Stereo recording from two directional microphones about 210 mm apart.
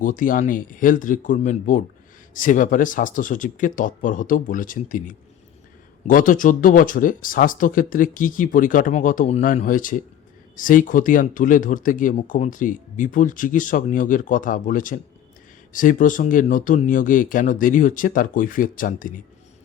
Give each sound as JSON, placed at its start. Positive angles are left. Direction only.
{"t": 0.0, "sound": "speech", "side_deg": 40}